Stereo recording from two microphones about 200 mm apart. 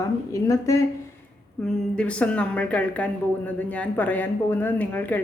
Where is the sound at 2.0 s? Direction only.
5° left (ahead or behind).